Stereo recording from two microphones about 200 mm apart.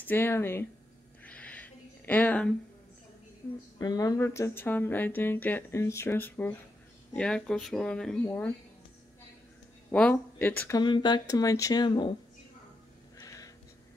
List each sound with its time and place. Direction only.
0.0 s speech: 10° left (ahead or behind)
1.2 s a sound: 5° left (ahead or behind)
3.7 s speech: 20° left (ahead or behind)
9.8 s speech: 5° left (ahead or behind)
10.8 s speech: 20° left (ahead or behind)
13.2 s a sound: 15° left (ahead or behind)